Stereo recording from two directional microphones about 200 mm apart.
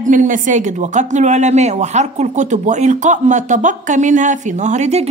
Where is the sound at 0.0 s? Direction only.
40° right (ahead or behind).